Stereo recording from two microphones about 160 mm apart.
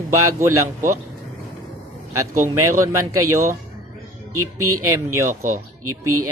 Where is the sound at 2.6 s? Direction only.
20° right (ahead or behind).